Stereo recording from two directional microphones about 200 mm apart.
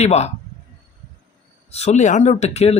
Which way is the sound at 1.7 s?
35° left (ahead or behind).